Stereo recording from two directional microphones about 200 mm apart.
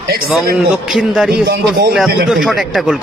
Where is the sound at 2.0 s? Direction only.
Centre (ahead or behind).